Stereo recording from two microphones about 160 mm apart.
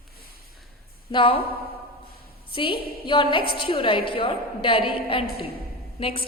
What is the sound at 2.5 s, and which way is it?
A woman's voice, 30° left (ahead or behind).